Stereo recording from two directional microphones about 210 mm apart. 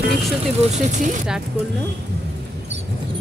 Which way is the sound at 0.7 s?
35° right (ahead or behind).